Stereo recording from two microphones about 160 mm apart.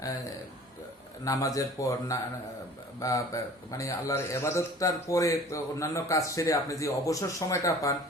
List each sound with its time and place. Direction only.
1.2 s a man's voice: 20° left (ahead or behind)